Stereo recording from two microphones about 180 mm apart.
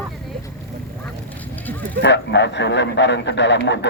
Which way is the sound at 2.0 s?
75° left (ahead or behind).